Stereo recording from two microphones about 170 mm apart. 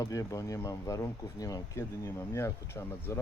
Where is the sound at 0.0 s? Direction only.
20° left (ahead or behind).